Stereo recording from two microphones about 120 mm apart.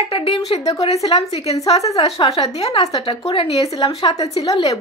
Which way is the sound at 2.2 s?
45° left (ahead or behind).